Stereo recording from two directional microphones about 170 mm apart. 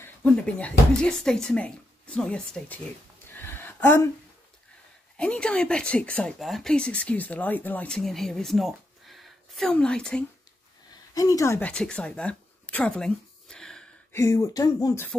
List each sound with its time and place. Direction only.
0.0 s speech: 10° left (ahead or behind)
3.3 s a sound: 10° left (ahead or behind)
5.1 s speech: 5° left (ahead or behind)
11.1 s speech: 20° left (ahead or behind)
11.7 s speech: 5° left (ahead or behind)
14.1 s speech: 20° left (ahead or behind)